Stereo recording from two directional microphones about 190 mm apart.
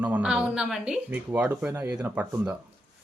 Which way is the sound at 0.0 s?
5° right (ahead or behind).